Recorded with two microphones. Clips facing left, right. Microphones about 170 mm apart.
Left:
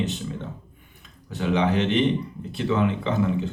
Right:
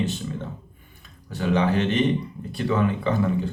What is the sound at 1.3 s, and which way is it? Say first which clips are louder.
Speech: even; 20° left (ahead or behind).